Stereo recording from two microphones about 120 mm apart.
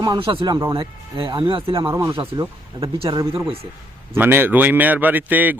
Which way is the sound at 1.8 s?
25° right (ahead or behind).